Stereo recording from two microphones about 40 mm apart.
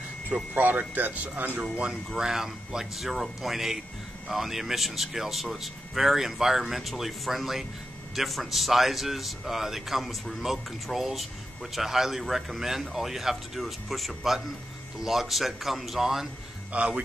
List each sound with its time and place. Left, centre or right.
0.6 s speech: right
1.6 s speech: right
2.1 s speech: centre
16.7 s a man's voice: right